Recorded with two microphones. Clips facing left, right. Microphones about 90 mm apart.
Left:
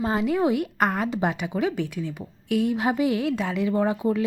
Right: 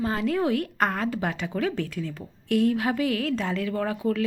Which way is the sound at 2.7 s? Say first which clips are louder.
Left 2 dB; 20° left (ahead or behind).